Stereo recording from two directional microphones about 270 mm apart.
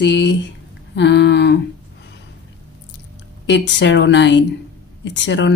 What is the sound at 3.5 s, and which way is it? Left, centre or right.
A woman's voice, left.